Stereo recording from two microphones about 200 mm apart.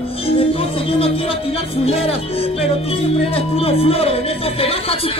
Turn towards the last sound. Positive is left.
turn(degrees=30)  # may be behind; listen again after turning